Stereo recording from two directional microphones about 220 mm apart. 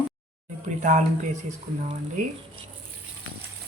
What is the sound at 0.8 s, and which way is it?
Speech, 35° right (ahead or behind).